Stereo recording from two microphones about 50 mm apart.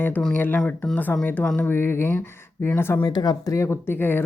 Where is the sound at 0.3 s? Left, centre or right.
Left.